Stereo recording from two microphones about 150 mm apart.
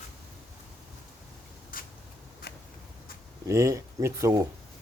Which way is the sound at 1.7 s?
65° left (ahead or behind).